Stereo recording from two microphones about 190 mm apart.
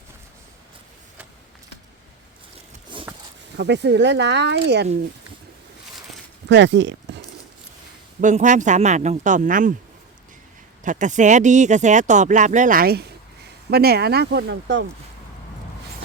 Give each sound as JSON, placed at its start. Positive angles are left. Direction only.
{"t": 2.9, "sound": "a sound", "side_deg": -25}
{"t": 3.6, "sound": "speech", "side_deg": -65}
{"t": 6.5, "sound": "speech", "side_deg": -70}
{"t": 8.2, "sound": "speech", "side_deg": -40}
{"t": 10.8, "sound": "speech", "side_deg": -40}